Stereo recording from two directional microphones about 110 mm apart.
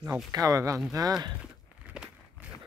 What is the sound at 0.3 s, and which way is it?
Speech, 30° right (ahead or behind).